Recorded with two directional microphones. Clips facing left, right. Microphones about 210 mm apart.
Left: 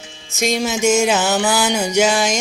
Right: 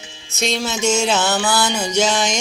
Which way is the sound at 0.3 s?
15° left (ahead or behind).